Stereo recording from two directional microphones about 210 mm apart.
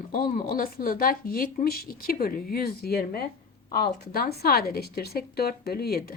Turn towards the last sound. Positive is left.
turn(degrees=45)  # may be behind; listen again after turning